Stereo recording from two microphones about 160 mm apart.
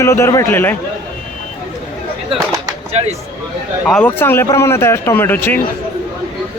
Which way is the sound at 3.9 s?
10° left (ahead or behind).